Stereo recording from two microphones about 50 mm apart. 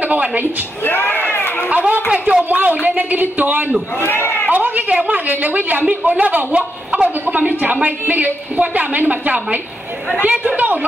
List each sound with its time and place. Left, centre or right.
0.0 s speech: right
0.8 s a sound: left
2.0 s a woman's voice: right
4.0 s a man's voice: left
4.5 s a woman's voice: right